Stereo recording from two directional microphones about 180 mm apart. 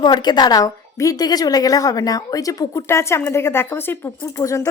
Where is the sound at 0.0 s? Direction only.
25° left (ahead or behind).